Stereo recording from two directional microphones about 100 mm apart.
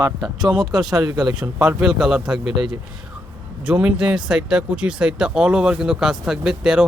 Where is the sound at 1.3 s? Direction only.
10° right (ahead or behind).